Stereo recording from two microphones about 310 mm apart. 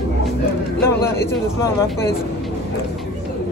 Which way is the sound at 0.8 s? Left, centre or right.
Centre.